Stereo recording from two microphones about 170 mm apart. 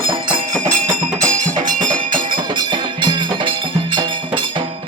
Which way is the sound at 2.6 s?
25° right (ahead or behind).